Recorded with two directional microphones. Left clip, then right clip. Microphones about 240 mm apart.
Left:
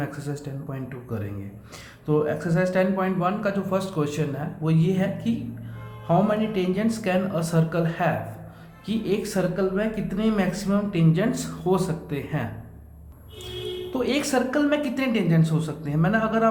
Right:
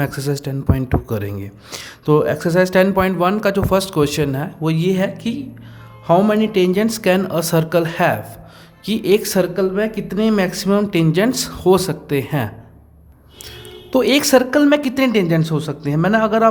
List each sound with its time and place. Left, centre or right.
0.0 s a man's voice: right
13.9 s a man's voice: right